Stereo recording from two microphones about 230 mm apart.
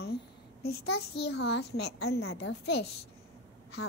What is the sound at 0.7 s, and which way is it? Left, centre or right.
Speech, left.